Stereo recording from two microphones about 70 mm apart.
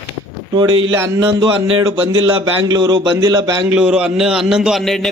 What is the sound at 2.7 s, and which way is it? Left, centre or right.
Speech, right.